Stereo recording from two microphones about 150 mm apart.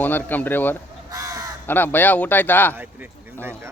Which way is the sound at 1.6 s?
15° left (ahead or behind).